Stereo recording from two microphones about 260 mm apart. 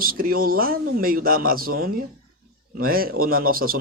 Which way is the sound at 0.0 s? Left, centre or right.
Right.